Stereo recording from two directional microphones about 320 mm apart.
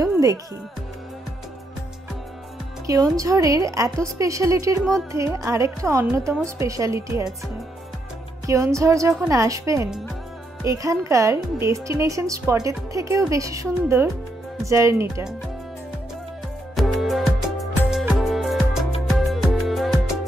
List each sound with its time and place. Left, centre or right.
0.0 s music: centre
2.9 s speech: centre
8.5 s speech: centre
16.7 s music: centre